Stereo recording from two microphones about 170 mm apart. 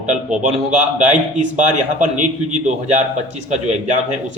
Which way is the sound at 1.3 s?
45° right (ahead or behind).